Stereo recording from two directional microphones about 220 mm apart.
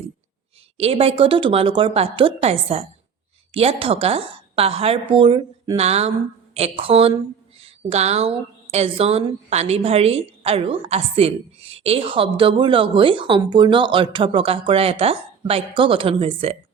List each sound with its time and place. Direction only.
0.8 s a woman's voice: 25° right (ahead or behind)